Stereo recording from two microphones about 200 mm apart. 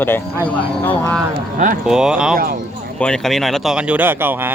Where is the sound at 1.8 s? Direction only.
5° right (ahead or behind).